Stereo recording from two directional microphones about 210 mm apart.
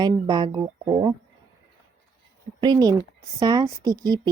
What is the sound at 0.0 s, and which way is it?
Speech, 20° right (ahead or behind).